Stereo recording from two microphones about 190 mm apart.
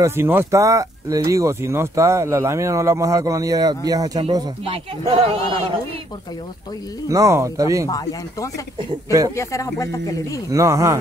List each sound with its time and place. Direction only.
0.0 s speech: 15° right (ahead or behind); by 5.7 s 30° right (ahead or behind)
7.1 s speech: 15° right (ahead or behind)
7.9 s speech: 20° left (ahead or behind)
8.7 s speech: 15° right (ahead or behind)
9.3 s speech: 15° left (ahead or behind)
10.5 s speech: 15° right (ahead or behind)